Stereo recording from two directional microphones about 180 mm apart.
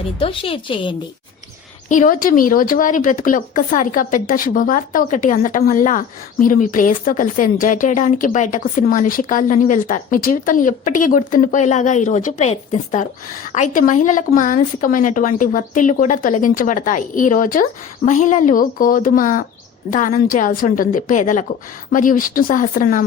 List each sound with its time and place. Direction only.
0.2 s a woman's voice: 30° left (ahead or behind)
1.9 s speech: 45° left (ahead or behind)